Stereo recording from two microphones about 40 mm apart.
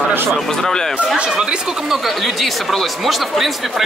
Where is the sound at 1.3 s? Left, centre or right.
Centre.